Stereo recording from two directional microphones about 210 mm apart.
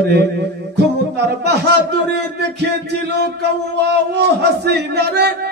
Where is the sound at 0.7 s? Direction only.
50° right (ahead or behind).